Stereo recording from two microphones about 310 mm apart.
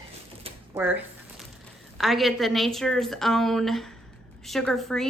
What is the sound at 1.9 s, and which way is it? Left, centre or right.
A woman's voice, centre.